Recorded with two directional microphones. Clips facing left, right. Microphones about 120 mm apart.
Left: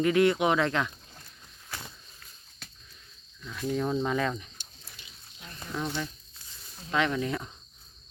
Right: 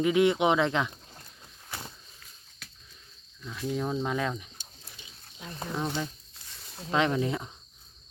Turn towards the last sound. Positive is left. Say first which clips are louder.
# right 1 dB
turn(degrees=-20)  # may be behind; listen again after turning